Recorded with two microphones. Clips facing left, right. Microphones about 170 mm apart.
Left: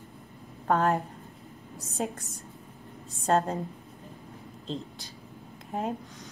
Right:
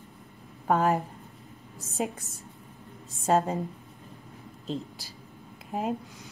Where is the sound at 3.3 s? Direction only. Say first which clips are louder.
Right 1 dB; 5° right (ahead or behind).